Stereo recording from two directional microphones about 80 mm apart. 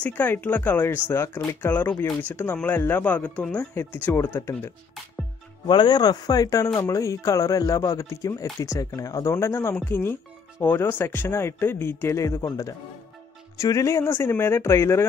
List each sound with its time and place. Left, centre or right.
0.0 s speech: left
5.7 s speech: left